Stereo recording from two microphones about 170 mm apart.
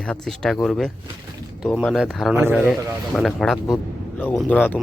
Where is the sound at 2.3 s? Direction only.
10° right (ahead or behind).